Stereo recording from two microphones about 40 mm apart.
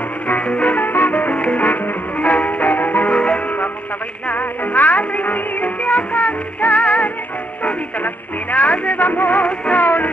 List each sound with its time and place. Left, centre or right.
0.5 s music: left
3.1 s music: left
4.3 s music: left